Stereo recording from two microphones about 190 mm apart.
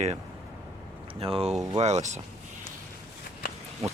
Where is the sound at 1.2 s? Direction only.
30° right (ahead or behind).